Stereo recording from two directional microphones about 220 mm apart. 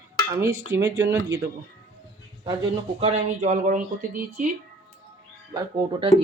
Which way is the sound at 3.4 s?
35° right (ahead or behind).